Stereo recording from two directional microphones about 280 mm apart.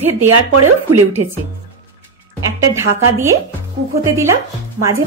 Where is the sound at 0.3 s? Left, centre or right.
Right.